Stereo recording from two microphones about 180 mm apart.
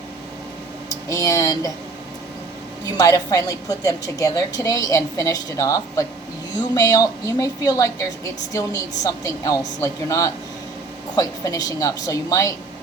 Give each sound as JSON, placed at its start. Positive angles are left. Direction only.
{"t": 1.0, "sound": "speech", "side_deg": 20}
{"t": 2.8, "sound": "a woman's voice", "side_deg": 20}